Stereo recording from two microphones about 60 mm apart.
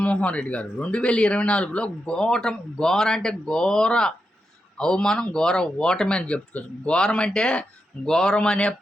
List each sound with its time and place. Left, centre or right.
0.0 s speech: left